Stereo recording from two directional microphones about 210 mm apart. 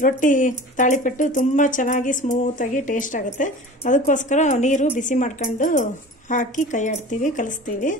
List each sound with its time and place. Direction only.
0.0 s speech: 40° left (ahead or behind)